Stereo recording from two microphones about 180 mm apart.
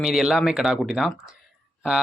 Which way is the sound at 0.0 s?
Centre (ahead or behind).